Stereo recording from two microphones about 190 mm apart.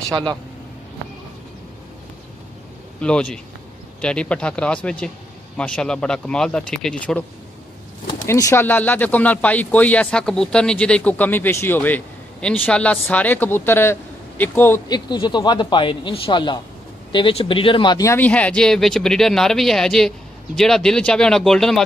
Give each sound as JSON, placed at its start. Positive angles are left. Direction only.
{"t": 0.1, "sound": "speech", "side_deg": -25}
{"t": 3.0, "sound": "speech", "side_deg": 5}
{"t": 8.3, "sound": "speech", "side_deg": 15}